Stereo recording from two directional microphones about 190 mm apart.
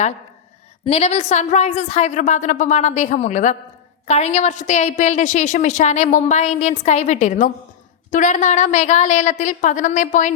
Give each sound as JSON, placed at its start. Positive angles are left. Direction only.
{"t": 0.9, "sound": "a woman's voice", "side_deg": 35}